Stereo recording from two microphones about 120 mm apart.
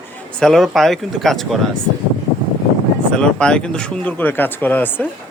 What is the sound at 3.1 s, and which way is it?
Speech, 5° left (ahead or behind).